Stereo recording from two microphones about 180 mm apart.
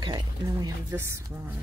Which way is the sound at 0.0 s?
20° right (ahead or behind).